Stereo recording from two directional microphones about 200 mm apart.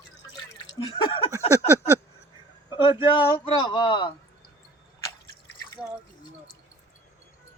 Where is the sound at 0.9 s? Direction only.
25° left (ahead or behind).